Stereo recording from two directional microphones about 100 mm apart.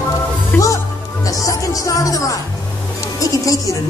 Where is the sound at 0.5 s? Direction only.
10° left (ahead or behind).